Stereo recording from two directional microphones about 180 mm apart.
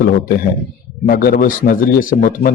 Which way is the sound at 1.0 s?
55° left (ahead or behind).